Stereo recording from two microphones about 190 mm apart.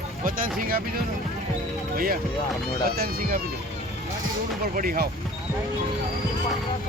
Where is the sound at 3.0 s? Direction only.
50° right (ahead or behind).